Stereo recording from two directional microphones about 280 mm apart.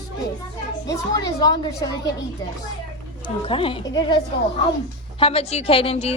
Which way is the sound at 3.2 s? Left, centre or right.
Centre.